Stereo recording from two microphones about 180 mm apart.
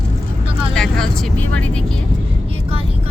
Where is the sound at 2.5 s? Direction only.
30° right (ahead or behind).